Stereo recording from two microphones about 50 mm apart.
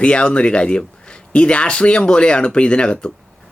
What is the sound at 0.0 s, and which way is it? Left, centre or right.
Speech, left.